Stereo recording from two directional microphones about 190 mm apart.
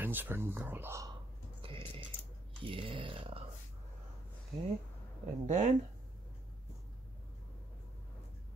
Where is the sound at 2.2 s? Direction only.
30° right (ahead or behind).